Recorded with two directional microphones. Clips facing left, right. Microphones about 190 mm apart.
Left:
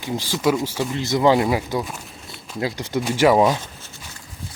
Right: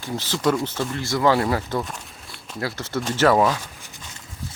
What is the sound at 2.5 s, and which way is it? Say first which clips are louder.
Speech: left 3 dB; 15° left (ahead or behind).